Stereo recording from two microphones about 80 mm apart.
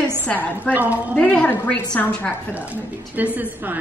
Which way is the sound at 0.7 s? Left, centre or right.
Centre.